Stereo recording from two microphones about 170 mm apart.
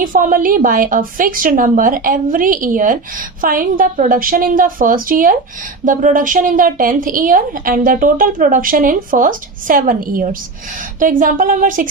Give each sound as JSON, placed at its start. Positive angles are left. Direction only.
{"t": 0.0, "sound": "a woman's voice", "side_deg": -50}